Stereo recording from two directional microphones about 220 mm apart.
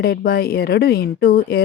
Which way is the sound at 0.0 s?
45° left (ahead or behind).